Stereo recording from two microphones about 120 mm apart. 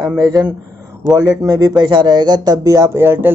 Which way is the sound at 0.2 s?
30° right (ahead or behind).